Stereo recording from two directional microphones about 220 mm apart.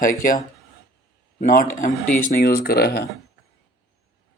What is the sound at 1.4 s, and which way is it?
Speech, 35° left (ahead or behind).